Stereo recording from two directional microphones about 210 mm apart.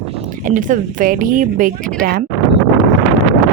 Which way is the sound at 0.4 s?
40° right (ahead or behind).